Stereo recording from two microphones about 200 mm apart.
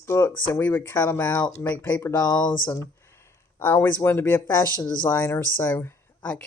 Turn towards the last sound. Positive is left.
turn(degrees=10)  # may be behind; listen again after turning